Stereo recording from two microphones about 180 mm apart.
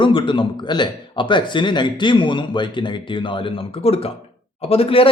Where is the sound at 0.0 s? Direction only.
25° left (ahead or behind).